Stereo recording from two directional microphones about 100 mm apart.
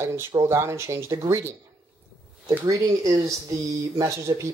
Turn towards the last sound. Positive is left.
turn(degrees=-30)  # may be behind; listen again after turning